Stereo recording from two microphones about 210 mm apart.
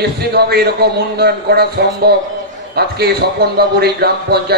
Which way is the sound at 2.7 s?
50° right (ahead or behind).